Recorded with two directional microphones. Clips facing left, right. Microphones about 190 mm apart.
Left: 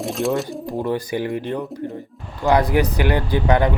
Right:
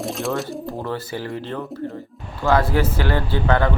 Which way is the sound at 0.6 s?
15° left (ahead or behind).